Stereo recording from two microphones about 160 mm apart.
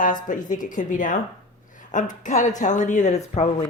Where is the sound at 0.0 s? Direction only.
55° left (ahead or behind).